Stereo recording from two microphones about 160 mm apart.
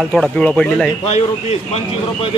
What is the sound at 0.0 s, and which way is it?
Speech, centre (ahead or behind).